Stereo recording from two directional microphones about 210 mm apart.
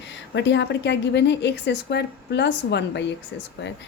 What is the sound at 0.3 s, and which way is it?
A woman's voice, 55° left (ahead or behind).